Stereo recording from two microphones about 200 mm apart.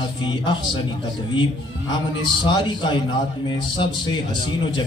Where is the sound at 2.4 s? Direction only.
25° left (ahead or behind).